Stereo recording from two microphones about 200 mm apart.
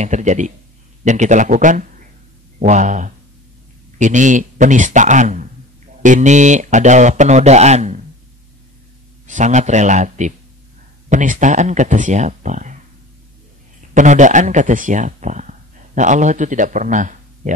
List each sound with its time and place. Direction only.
0.0 s a man's voice: 35° right (ahead or behind)
9.3 s a man's voice: 35° right (ahead or behind)
13.9 s a man's voice: 40° right (ahead or behind)